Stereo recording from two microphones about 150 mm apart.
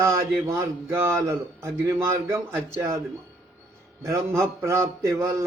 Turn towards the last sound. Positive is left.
turn(degrees=-20)  # may be behind; listen again after turning